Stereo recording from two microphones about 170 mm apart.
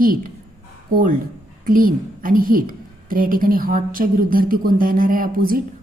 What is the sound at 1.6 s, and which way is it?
A woman's voice, 55° right (ahead or behind).